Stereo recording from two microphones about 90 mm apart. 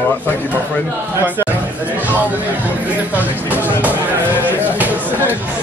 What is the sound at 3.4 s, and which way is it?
Speech, 25° left (ahead or behind).